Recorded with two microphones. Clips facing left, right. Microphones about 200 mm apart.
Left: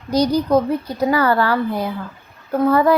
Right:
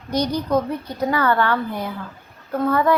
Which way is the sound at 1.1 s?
35° left (ahead or behind).